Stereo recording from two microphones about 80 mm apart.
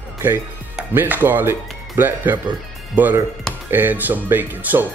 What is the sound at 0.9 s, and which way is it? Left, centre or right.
Speech, right.